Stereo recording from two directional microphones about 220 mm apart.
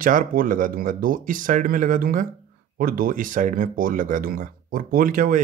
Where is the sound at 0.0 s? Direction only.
40° right (ahead or behind).